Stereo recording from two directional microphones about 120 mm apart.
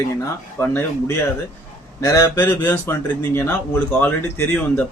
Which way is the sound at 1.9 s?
25° left (ahead or behind).